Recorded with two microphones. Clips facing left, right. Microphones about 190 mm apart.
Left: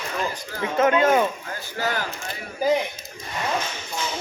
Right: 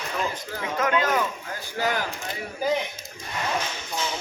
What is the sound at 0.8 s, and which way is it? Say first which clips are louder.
Speech: left 6 dB; 25° left (ahead or behind).